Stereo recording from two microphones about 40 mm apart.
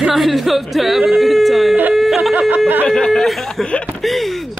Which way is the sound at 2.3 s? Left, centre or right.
Right.